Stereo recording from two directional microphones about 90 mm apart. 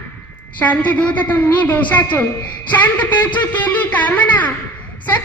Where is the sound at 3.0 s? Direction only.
15° left (ahead or behind).